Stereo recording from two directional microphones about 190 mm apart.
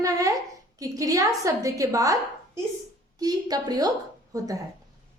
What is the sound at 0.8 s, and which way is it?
A woman's voice, 20° right (ahead or behind).